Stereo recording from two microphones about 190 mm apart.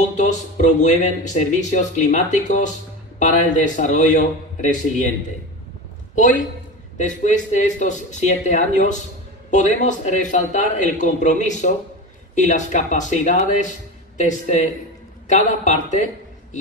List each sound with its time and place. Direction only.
0.2 s a man's voice: 40° left (ahead or behind)
6.1 s a man's voice: 40° left (ahead or behind)